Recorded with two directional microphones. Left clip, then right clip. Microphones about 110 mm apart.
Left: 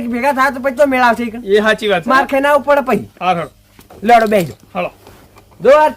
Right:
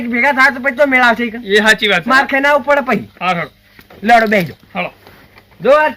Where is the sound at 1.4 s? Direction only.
45° left (ahead or behind).